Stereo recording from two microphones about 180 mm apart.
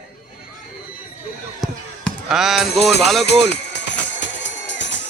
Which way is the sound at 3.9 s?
85° left.